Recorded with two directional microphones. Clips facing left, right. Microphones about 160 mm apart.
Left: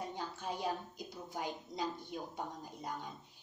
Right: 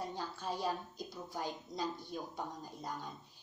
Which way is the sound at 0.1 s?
20° left (ahead or behind).